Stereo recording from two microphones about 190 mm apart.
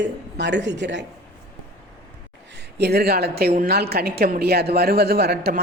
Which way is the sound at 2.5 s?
60° right (ahead or behind).